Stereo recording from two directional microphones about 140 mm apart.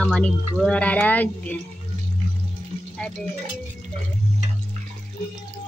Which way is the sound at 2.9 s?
5° left (ahead or behind).